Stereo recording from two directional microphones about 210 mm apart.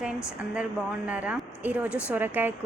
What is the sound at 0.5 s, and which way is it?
A woman's voice, 5° right (ahead or behind).